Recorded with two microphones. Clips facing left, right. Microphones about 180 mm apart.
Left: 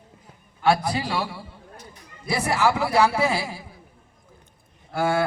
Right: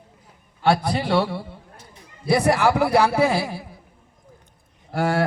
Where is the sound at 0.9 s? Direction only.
60° right (ahead or behind).